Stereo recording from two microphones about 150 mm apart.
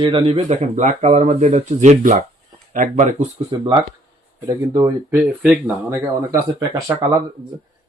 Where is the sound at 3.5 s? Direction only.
35° right (ahead or behind); by 7.0 s 15° right (ahead or behind).